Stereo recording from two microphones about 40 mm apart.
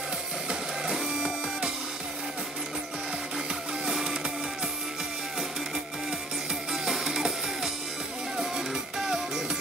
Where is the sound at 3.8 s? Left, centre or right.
Centre.